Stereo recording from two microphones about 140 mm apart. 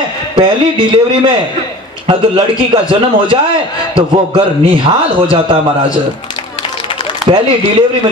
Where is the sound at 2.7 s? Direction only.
40° right (ahead or behind).